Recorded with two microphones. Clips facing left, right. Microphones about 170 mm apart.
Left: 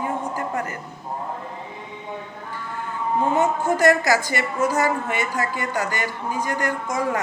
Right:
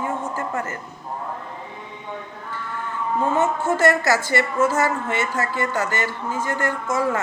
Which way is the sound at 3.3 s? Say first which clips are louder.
Even; 15° left (ahead or behind).